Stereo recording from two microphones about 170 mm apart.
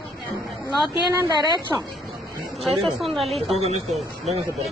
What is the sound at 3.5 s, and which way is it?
Speech, 40° right (ahead or behind).